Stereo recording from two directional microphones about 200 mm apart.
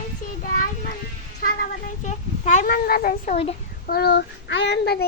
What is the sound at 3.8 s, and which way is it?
Child singing, 50° left (ahead or behind).